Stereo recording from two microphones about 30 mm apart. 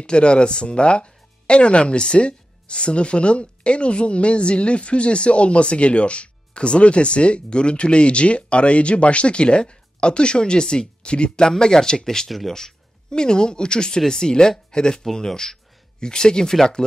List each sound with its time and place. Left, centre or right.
0.0 s speech: left; by 12.3 s centre
12.3 s speech: centre
13.1 s speech: left